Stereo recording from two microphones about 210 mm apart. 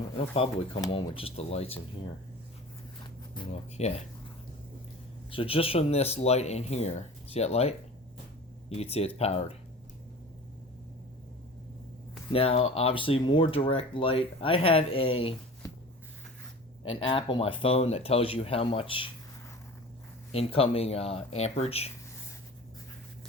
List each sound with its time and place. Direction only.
0.2 s speech: 25° left (ahead or behind)
3.0 s a sound: 25° left (ahead or behind)
5.3 s speech: 25° left (ahead or behind)
12.3 s speech: 25° left (ahead or behind)
16.9 s speech: 25° left (ahead or behind)
20.3 s speech: 25° left (ahead or behind)